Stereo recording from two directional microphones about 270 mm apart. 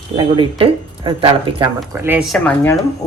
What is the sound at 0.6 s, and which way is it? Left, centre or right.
Speech, centre.